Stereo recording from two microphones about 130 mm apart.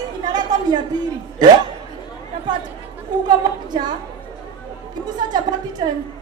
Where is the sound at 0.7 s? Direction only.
30° right (ahead or behind).